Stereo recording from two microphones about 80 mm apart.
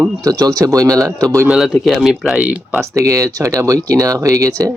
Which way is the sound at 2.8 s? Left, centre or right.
Right.